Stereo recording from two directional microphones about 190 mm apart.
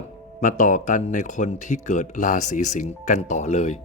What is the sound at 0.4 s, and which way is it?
Speech, 40° left (ahead or behind).